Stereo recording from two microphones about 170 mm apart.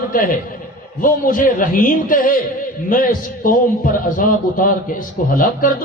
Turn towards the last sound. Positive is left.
turn(degrees=55)  # may be behind; listen again after turning